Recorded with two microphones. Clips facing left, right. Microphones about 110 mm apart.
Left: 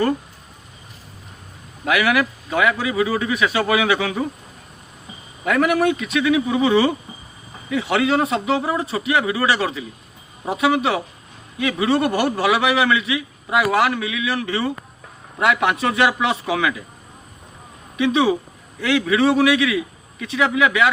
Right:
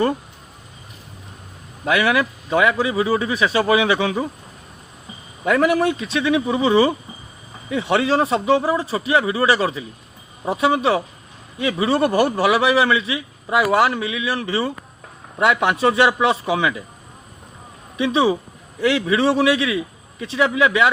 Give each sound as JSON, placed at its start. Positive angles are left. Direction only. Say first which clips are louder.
{"t": 1.8, "sound": "a man's voice", "louder": "even", "side_deg": -25}
{"t": 5.5, "sound": "a man's voice", "louder": "right 1 dB", "side_deg": -25}
{"t": 17.9, "sound": "a man's voice", "louder": "even", "side_deg": -25}